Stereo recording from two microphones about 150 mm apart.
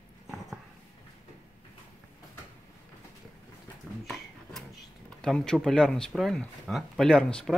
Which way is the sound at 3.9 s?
5° right (ahead or behind).